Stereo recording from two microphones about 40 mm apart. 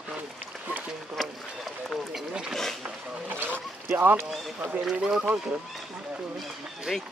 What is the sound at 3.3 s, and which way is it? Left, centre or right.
Boat, right.